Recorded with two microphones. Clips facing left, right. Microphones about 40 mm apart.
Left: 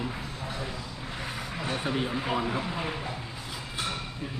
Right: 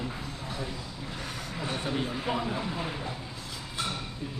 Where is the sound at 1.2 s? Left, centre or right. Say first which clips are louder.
Left 2 dB; centre.